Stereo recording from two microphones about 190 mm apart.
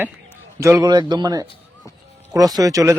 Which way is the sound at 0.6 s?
15° right (ahead or behind).